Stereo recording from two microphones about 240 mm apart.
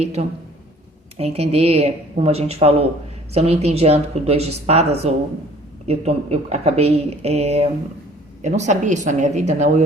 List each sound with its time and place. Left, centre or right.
0.0 s speech: right